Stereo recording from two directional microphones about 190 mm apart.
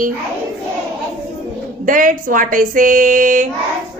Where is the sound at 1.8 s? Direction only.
45° right (ahead or behind).